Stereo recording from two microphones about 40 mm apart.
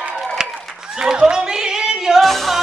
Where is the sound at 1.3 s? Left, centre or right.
Centre.